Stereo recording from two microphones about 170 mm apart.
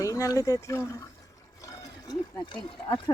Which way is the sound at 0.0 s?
20° left (ahead or behind).